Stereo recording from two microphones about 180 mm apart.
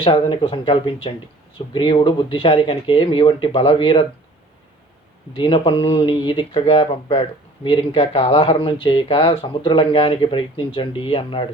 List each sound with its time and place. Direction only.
0.0 s speech: 30° left (ahead or behind)
5.4 s speech: 25° left (ahead or behind)